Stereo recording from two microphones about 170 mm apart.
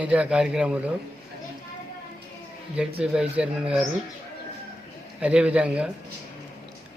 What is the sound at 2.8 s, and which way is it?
A man's voice, 5° right (ahead or behind).